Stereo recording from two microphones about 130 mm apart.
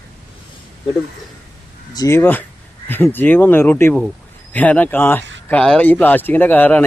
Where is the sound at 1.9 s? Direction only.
30° left (ahead or behind).